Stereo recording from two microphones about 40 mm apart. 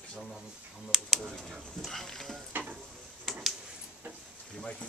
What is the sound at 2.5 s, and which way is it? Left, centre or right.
Stir, right.